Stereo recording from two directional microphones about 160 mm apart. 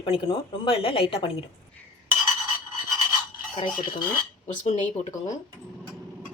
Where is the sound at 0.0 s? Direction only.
35° left (ahead or behind).